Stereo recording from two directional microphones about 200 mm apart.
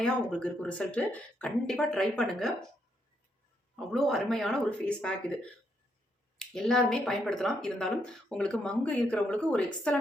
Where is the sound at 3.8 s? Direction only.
Centre (ahead or behind).